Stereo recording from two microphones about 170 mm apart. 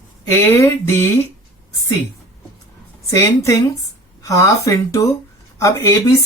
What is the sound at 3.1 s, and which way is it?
Speech, 20° left (ahead or behind).